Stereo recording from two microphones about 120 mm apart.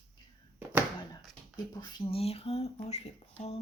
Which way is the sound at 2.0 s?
55° left (ahead or behind).